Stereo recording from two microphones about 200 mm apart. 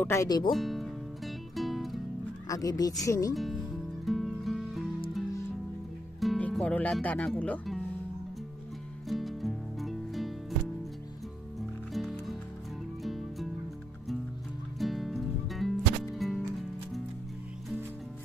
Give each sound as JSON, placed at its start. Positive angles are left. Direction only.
{"t": 0.0, "sound": "speech", "side_deg": 15}
{"t": 0.5, "sound": "music", "side_deg": 0}
{"t": 2.4, "sound": "speech", "side_deg": 15}
{"t": 4.0, "sound": "music", "side_deg": 0}
{"t": 6.2, "sound": "speech", "side_deg": 0}
{"t": 9.0, "sound": "music", "side_deg": 0}
{"t": 11.9, "sound": "music", "side_deg": 0}
{"t": 14.8, "sound": "music", "side_deg": 0}